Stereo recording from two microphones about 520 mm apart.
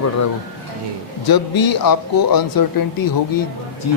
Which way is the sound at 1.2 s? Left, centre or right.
Left.